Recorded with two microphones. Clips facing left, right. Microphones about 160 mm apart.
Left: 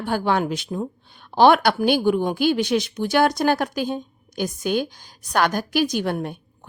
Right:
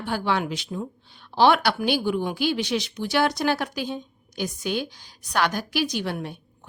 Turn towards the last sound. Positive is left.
turn(degrees=50)  # may be behind; listen again after turning